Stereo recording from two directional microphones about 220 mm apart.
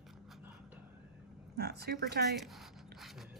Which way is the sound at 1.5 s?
45° right (ahead or behind).